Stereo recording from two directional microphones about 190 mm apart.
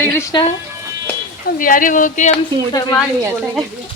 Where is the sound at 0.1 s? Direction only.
15° left (ahead or behind).